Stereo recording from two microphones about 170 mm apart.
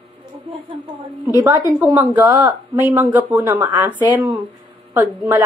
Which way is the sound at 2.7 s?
10° right (ahead or behind).